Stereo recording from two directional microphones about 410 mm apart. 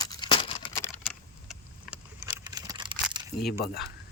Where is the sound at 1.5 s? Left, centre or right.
Centre.